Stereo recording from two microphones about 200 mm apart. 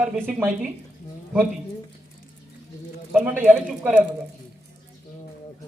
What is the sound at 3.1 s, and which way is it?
Speech, 10° right (ahead or behind).